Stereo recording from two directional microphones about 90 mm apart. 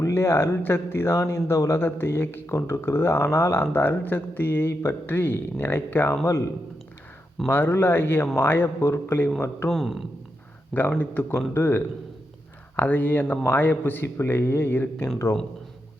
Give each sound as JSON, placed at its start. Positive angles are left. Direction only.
{"t": 0.0, "sound": "speech", "side_deg": 30}
{"t": 7.4, "sound": "speech", "side_deg": 25}
{"t": 9.6, "sound": "speech", "side_deg": 0}
{"t": 10.8, "sound": "speech", "side_deg": 20}